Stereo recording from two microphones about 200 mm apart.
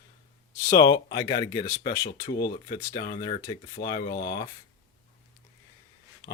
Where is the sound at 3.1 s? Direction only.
30° left (ahead or behind).